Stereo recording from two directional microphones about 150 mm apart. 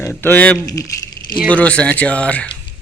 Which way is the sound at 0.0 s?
15° left (ahead or behind).